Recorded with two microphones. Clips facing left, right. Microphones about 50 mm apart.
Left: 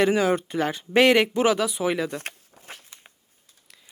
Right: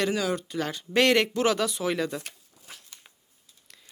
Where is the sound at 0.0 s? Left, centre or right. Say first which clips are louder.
Left 6 dB; left.